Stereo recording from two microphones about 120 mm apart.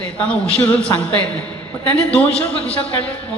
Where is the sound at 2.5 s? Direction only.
55° left (ahead or behind).